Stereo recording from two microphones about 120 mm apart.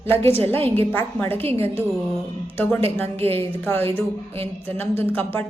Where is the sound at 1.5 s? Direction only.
20° left (ahead or behind).